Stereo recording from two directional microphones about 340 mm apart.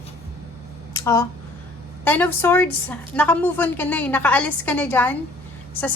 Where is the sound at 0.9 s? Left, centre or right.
Centre.